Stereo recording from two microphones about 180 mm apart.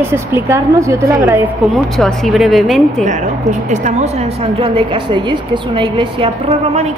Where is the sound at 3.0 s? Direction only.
40° right (ahead or behind).